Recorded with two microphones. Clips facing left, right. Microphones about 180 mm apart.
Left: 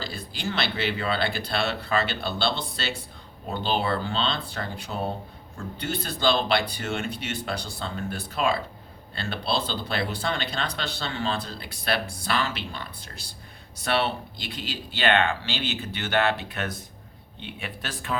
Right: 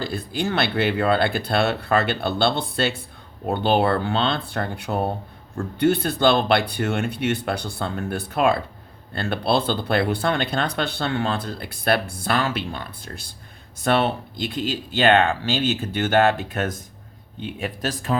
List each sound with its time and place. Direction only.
0.0 s speech: 55° right (ahead or behind); by 18.2 s 40° right (ahead or behind)